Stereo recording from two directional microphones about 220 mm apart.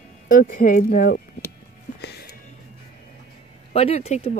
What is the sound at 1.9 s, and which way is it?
Music, 45° left (ahead or behind).